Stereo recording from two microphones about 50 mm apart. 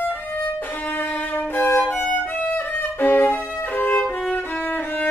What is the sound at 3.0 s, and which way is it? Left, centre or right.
Violin, left.